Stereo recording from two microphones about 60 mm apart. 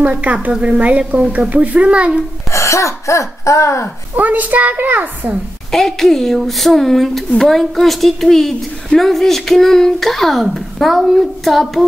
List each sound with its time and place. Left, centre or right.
0.0 s a woman's voice: right
2.5 s speech: left
4.2 s a woman's voice: right
5.7 s speech: centre